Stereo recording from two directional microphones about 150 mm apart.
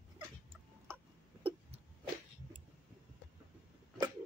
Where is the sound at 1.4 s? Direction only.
35° right (ahead or behind).